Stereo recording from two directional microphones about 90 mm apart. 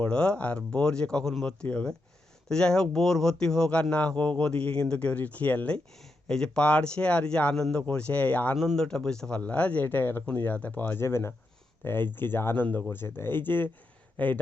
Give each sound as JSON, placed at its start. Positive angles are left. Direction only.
{"t": 0.0, "sound": "speech", "side_deg": 10}
{"t": 8.5, "sound": "speech", "side_deg": 5}